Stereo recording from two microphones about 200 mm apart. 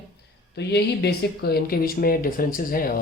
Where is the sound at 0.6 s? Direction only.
55° left (ahead or behind).